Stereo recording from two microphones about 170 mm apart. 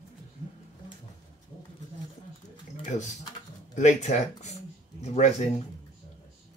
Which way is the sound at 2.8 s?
45° left (ahead or behind).